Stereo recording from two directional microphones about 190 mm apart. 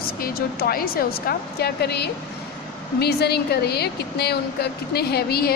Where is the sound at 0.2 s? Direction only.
50° left (ahead or behind).